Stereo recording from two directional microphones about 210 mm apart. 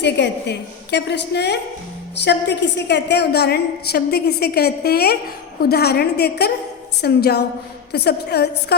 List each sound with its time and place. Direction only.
0.0 s a woman's voice: 55° left (ahead or behind)